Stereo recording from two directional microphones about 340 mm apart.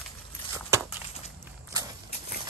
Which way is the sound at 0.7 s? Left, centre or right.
Centre.